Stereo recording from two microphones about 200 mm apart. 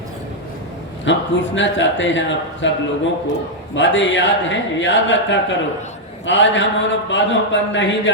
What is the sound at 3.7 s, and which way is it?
Speech, 65° left (ahead or behind).